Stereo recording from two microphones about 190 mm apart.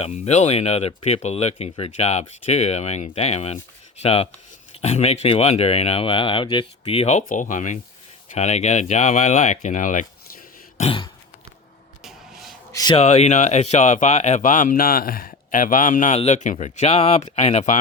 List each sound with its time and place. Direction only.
0.0 s speech: 35° left (ahead or behind)
9.6 s a sound: 40° left (ahead or behind)
12.0 s vehicle: centre (ahead or behind)
12.7 s a man's voice: 20° left (ahead or behind)
13.0 s speech: 35° left (ahead or behind)